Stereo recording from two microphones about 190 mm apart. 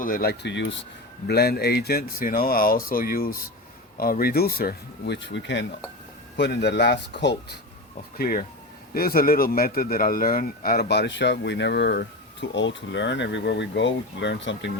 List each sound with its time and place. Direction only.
0.0 s a man's voice: 50° left (ahead or behind); by 0.9 s 75° left (ahead or behind)
1.3 s a man's voice: 55° left (ahead or behind)
8.2 s a man's voice: 50° left (ahead or behind); by 14.7 s 70° left (ahead or behind)